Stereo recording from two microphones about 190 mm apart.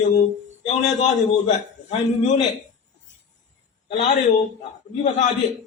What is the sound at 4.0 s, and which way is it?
A man's voice, 40° left (ahead or behind).